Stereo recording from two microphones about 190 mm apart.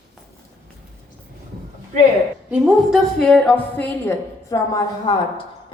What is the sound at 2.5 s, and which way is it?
A woman's voice, centre (ahead or behind).